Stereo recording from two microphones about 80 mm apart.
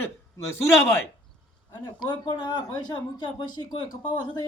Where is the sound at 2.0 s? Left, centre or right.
Left.